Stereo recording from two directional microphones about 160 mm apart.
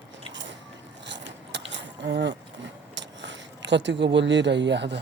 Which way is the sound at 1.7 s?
90° right.